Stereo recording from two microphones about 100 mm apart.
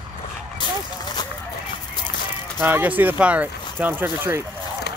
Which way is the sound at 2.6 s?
20° right (ahead or behind).